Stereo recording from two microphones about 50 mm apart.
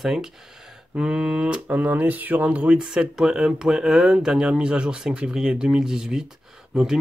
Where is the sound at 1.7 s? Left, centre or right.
Right.